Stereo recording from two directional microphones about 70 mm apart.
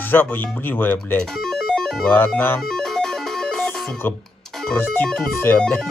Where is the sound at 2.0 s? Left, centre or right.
Left.